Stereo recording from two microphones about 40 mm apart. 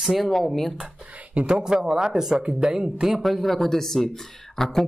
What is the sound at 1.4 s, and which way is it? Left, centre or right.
Speech, right.